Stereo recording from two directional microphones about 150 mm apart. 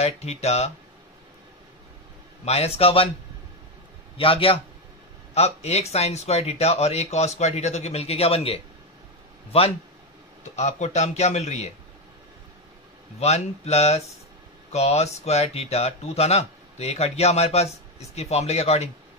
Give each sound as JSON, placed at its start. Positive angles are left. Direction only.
{"t": 0.0, "sound": "speech", "side_deg": 45}
{"t": 2.4, "sound": "speech", "side_deg": 45}
{"t": 4.2, "sound": "a man's voice", "side_deg": 35}
{"t": 10.5, "sound": "speech", "side_deg": 50}
{"t": 13.2, "sound": "speech", "side_deg": 45}